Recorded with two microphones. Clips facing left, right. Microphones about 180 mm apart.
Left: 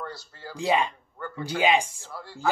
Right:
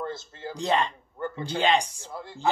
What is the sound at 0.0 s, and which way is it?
Speech, 20° right (ahead or behind).